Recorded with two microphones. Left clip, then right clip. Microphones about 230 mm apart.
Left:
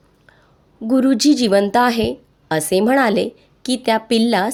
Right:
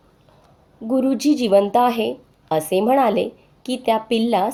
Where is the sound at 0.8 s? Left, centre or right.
Left.